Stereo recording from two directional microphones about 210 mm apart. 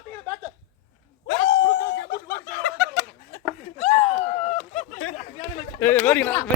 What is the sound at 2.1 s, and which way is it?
Snicker, 45° left (ahead or behind).